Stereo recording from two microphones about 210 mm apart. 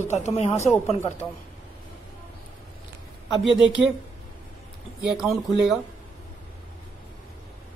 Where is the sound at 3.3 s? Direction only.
Centre (ahead or behind).